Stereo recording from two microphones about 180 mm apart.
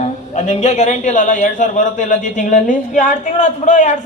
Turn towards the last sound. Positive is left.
turn(degrees=40)  # may be behind; listen again after turning